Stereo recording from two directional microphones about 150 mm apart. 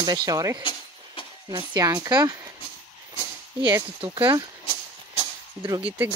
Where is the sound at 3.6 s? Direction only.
10° right (ahead or behind).